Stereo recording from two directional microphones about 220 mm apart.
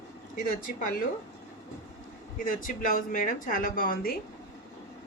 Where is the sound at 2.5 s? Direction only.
35° left (ahead or behind).